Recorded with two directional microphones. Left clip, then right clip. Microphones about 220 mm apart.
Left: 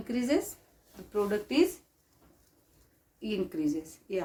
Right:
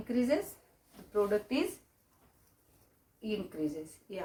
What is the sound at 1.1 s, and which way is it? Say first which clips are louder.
Speech: left 1 dB; 50° left (ahead or behind).